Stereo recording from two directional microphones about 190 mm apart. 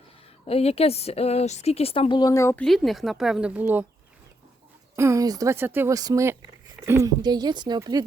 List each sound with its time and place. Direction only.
0.4 s a woman's voice: 30° left (ahead or behind); by 2.6 s 15° left (ahead or behind)
2.6 s speech: centre (ahead or behind)
4.9 s speech: 15° right (ahead or behind)